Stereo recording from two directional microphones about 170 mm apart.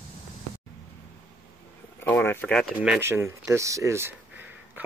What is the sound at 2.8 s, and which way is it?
Speech, 10° right (ahead or behind).